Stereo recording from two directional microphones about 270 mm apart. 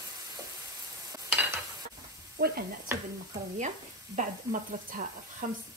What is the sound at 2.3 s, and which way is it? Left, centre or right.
Stir, right.